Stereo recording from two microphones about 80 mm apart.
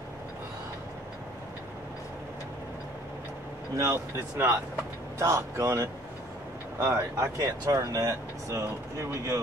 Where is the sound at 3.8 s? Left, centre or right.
Right.